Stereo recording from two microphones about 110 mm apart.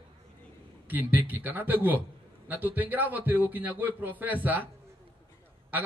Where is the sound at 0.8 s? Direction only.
15° right (ahead or behind).